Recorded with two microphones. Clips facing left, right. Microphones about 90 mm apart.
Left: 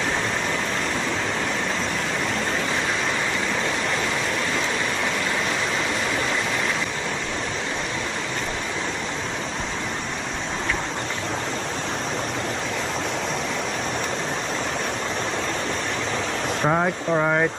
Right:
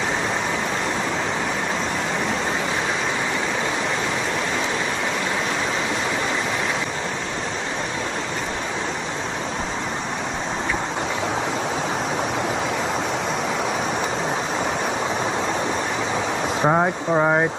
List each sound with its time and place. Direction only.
16.6 s speech: 20° right (ahead or behind)